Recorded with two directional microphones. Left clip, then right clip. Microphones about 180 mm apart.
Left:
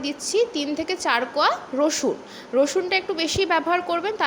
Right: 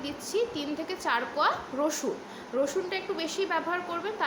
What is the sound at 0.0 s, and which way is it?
A woman's voice, 40° left (ahead or behind).